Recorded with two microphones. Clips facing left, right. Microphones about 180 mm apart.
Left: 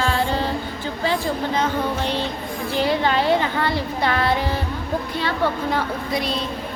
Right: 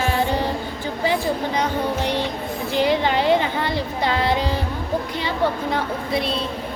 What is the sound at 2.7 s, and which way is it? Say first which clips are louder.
A child's voice: right 1 dB; 15° right (ahead or behind).